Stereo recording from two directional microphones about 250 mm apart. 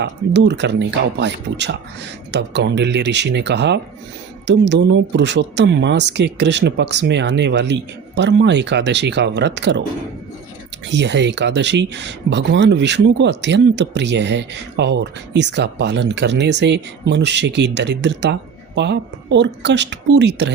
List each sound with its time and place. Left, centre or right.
0.0 s speech: right
10.8 s speech: right